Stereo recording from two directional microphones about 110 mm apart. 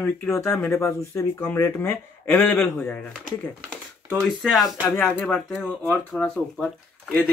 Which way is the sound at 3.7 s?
Centre (ahead or behind).